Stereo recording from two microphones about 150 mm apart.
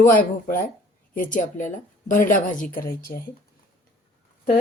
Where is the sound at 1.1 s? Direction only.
60° left (ahead or behind).